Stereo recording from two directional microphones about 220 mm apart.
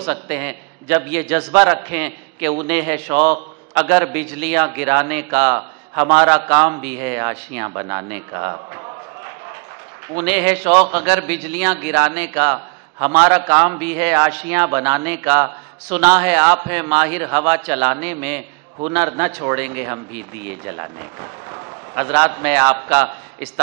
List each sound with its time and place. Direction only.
0.0 s a man's voice: 15° right (ahead or behind)
3.1 s a man's voice: 20° right (ahead or behind)
10.6 s a man's voice: 20° right (ahead or behind)
20.6 s a man's voice: 15° right (ahead or behind)